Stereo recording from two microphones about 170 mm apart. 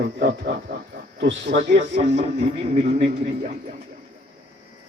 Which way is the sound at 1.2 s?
90° right.